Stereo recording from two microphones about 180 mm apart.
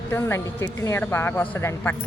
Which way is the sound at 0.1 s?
10° left (ahead or behind).